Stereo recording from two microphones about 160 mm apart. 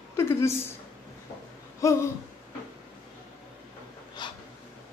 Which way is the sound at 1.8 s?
20° left (ahead or behind).